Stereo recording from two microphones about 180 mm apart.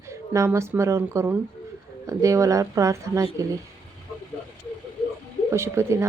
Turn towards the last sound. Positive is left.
turn(degrees=-15)  # may be behind; listen again after turning